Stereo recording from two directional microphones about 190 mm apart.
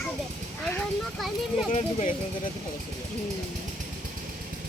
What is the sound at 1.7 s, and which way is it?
Speech, 45° left (ahead or behind).